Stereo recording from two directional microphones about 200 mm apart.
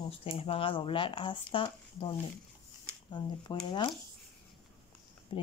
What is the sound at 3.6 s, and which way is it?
Speech, 25° left (ahead or behind).